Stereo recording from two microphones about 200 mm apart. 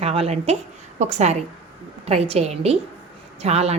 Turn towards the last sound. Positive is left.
turn(degrees=-30)  # may be behind; listen again after turning